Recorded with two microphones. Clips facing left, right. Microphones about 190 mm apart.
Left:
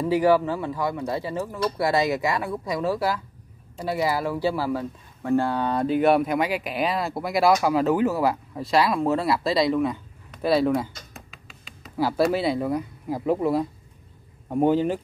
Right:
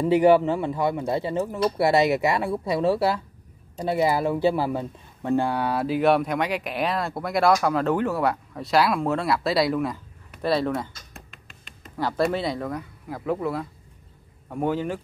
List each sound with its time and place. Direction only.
0.0 s speech: 25° right (ahead or behind); by 15.0 s 20° left (ahead or behind)